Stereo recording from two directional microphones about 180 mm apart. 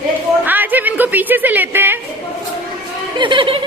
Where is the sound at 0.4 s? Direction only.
10° right (ahead or behind).